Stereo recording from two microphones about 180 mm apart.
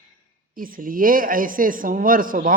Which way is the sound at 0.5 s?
50° right (ahead or behind).